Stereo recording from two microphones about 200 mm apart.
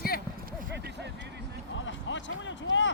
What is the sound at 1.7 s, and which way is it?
Speech, 70° left (ahead or behind).